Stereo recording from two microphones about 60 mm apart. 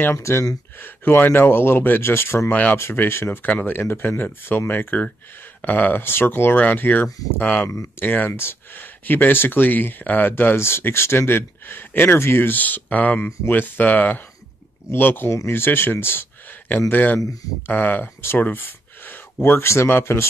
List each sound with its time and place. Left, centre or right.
0.2 s speech: left
0.7 s speech: left
2.5 s speech: left
2.8 s speech: left
3.4 s speech: left
8.3 s speech: left
14.9 s speech: left
18.2 s a sound: left
19.4 s speech: left